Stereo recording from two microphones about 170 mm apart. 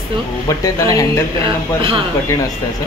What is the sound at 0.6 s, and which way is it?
Speech, 20° left (ahead or behind).